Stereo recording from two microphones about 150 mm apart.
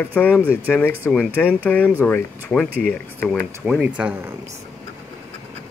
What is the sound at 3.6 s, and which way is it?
Speech, 5° right (ahead or behind).